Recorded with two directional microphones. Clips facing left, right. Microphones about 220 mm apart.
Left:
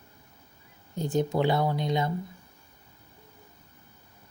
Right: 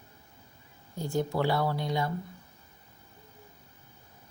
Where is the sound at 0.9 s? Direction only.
20° left (ahead or behind).